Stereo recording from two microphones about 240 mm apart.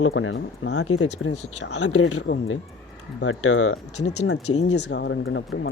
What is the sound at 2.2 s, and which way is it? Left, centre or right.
Speech, left.